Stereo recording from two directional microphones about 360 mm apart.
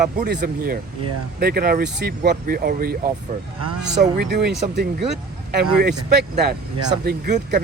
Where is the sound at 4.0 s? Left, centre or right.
Right.